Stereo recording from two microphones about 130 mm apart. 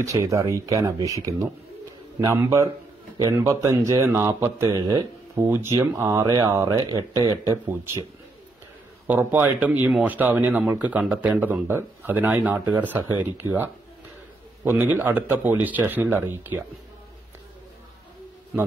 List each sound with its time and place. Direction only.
0.0 s speech: 25° right (ahead or behind)
9.0 s speech: 15° right (ahead or behind)